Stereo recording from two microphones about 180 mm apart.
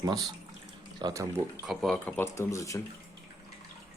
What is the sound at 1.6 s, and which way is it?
Speech, 5° left (ahead or behind).